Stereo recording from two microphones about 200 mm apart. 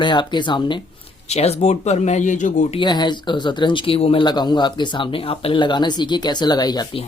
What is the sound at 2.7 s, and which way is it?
Speech, 20° left (ahead or behind).